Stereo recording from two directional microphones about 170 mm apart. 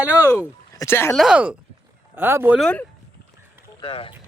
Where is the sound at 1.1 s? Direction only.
5° right (ahead or behind).